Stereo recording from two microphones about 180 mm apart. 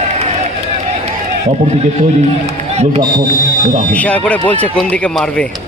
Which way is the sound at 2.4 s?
35° right (ahead or behind).